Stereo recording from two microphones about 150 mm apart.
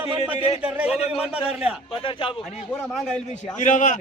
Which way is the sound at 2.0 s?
35° left (ahead or behind).